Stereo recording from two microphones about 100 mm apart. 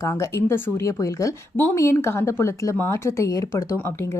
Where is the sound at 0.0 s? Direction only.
30° left (ahead or behind).